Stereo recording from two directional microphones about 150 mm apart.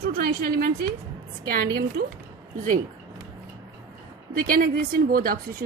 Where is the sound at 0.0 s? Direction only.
75° right (ahead or behind).